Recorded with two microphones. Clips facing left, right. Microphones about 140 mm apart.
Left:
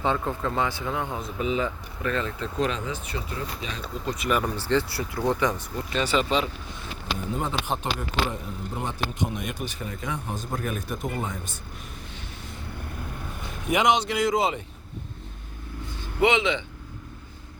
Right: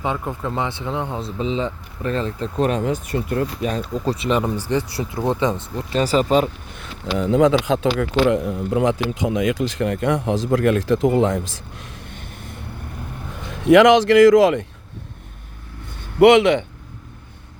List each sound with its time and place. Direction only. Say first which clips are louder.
0.0 s speech: right 1 dB; 15° right (ahead or behind); by 2.5 s 35° right (ahead or behind)
2.6 s speech: right 8 dB; 50° right (ahead or behind)
4.0 s speech: right 4 dB; 30° right (ahead or behind)
4.5 s speech: right 3 dB; 15° right (ahead or behind)
5.9 s speech: right 7 dB; 40° right (ahead or behind)
6.7 s speech: right 11 dB; 90° right
13.7 s speech: right 11 dB; 90° right
16.2 s speech: right 11 dB; 70° right (ahead or behind)